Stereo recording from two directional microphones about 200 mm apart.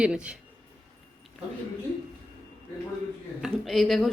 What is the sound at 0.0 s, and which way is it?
Speech, 5° right (ahead or behind).